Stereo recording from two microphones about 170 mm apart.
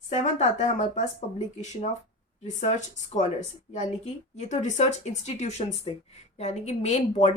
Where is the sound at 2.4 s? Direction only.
45° left (ahead or behind).